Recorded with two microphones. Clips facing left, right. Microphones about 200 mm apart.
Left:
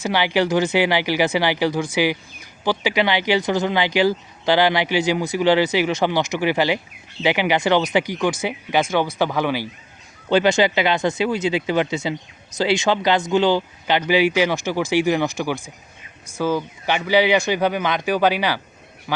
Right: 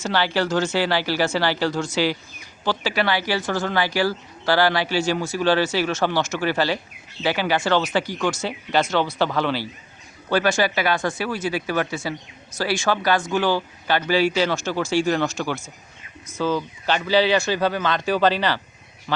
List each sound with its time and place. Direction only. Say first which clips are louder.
0.0 s speech: left 3 dB; 15° left (ahead or behind)